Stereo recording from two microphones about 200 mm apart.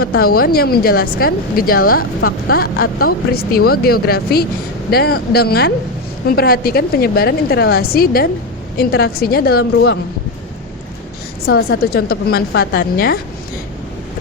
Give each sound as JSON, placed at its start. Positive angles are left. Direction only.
{"t": 0.0, "sound": "speech", "side_deg": 50}
{"t": 11.4, "sound": "speech", "side_deg": 50}